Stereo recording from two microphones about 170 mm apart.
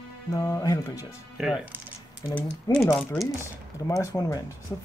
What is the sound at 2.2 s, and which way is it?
Speech, 10° left (ahead or behind).